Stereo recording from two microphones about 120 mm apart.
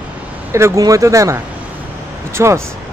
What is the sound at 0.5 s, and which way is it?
Speech, 25° right (ahead or behind).